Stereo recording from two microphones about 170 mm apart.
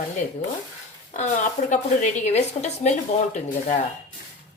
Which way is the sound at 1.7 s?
45° left (ahead or behind).